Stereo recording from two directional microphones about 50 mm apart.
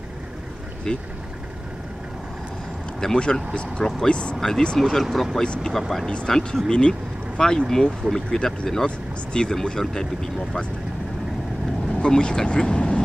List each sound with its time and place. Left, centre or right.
0.9 s speech: centre
3.0 s speech: centre
5.4 s speech: centre
5.7 s speech: centre
6.0 s speech: centre
12.0 s speech: centre